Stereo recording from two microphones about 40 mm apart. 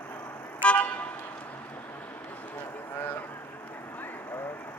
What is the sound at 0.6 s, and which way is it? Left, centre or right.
Vehicle, left.